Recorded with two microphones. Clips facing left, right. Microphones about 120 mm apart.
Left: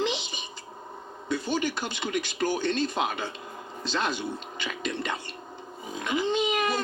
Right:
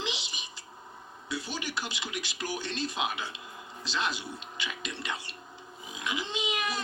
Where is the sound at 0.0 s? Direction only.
50° left (ahead or behind).